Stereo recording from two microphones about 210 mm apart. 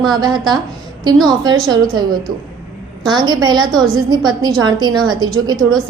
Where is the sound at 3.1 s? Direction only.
20° right (ahead or behind).